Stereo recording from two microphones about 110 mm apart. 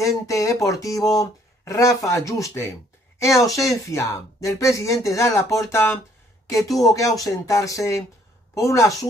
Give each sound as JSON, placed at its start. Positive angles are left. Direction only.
{"t": 0.0, "sound": "speech", "side_deg": 30}